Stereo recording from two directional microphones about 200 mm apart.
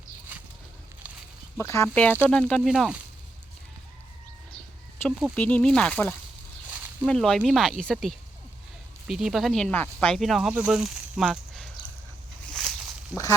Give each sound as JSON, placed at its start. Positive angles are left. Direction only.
{"t": 1.0, "sound": "a sound", "side_deg": -5}
{"t": 1.5, "sound": "speech", "side_deg": 15}
{"t": 5.0, "sound": "speech", "side_deg": 5}
{"t": 6.7, "sound": "a sound", "side_deg": -5}
{"t": 7.1, "sound": "speech", "side_deg": 5}
{"t": 13.1, "sound": "speech", "side_deg": 0}